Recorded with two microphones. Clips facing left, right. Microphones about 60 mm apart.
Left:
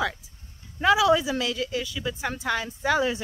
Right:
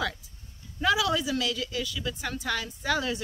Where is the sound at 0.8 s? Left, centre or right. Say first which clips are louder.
Left 6 dB; left.